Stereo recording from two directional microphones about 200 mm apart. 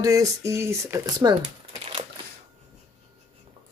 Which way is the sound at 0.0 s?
15° right (ahead or behind).